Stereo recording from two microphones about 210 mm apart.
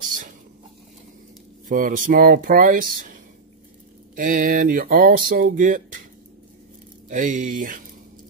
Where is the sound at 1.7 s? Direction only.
40° right (ahead or behind).